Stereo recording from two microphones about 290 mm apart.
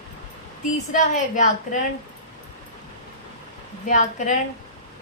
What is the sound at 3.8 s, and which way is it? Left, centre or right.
Speech, left.